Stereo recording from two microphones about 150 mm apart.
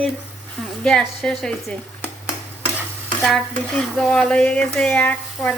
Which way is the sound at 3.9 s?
5° left (ahead or behind).